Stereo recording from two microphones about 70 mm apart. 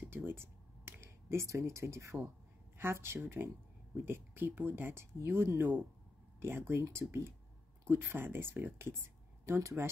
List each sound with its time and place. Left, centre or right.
0.1 s a sound: right
2.8 s speech: right
5.6 s speech: right
6.4 s speech: right
9.5 s speech: right